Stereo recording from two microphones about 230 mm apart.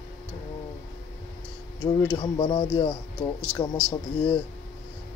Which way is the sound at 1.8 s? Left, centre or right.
Centre.